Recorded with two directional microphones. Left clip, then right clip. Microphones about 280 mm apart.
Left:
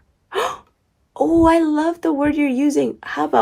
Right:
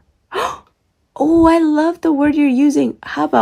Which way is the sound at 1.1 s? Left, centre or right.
Right.